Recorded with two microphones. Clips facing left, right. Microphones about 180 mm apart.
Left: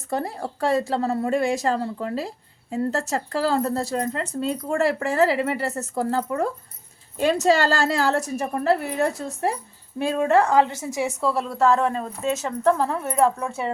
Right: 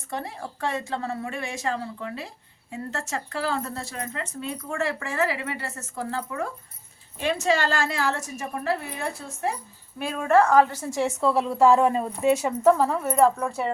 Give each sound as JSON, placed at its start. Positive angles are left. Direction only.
{"t": 0.1, "sound": "speech", "side_deg": 40}
{"t": 10.0, "sound": "a woman's voice", "side_deg": 25}
{"t": 11.2, "sound": "a woman's voice", "side_deg": 0}
{"t": 11.4, "sound": "speech", "side_deg": -10}